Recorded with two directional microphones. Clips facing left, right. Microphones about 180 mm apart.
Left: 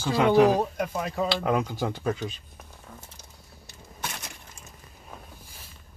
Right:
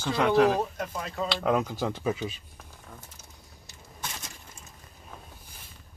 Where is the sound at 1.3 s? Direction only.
Centre (ahead or behind).